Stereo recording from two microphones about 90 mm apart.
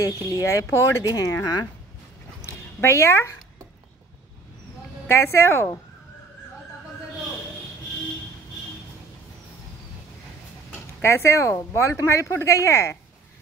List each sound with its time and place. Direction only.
0.3 s speech: 40° left (ahead or behind)
2.4 s a sound: 30° left (ahead or behind)
5.0 s speech: 30° left (ahead or behind)
11.0 s speech: 30° left (ahead or behind)